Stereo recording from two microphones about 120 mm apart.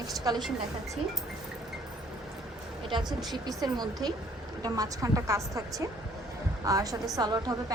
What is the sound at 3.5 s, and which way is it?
A woman's voice, 35° right (ahead or behind).